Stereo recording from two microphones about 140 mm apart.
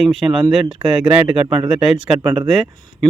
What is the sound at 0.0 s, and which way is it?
Speech, 5° right (ahead or behind).